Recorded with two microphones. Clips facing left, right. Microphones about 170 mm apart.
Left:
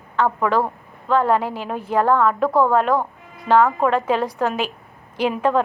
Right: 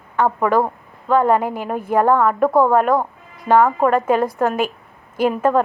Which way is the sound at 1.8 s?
10° right (ahead or behind).